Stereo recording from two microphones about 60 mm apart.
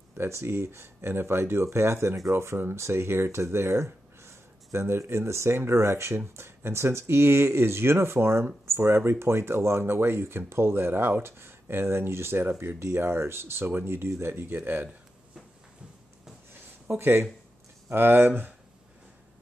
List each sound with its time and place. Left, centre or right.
0.2 s speech: right
17.0 s speech: right